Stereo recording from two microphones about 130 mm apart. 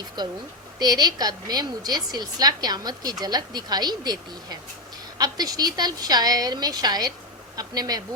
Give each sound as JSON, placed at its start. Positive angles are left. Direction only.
{"t": 0.2, "sound": "a woman's voice", "side_deg": -30}